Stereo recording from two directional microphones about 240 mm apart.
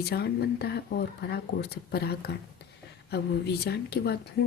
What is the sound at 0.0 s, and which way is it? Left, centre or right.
Speech, left.